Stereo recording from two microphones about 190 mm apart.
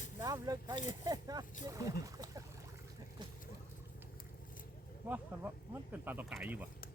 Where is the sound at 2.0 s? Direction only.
20° right (ahead or behind).